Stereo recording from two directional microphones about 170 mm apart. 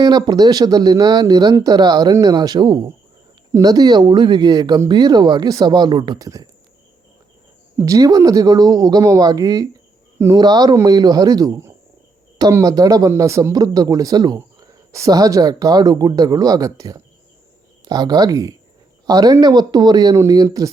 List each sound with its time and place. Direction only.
0.0 s speech: 25° right (ahead or behind)
7.8 s speech: 20° right (ahead or behind)